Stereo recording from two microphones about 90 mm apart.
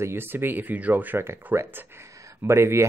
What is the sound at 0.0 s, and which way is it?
Speech, 25° right (ahead or behind).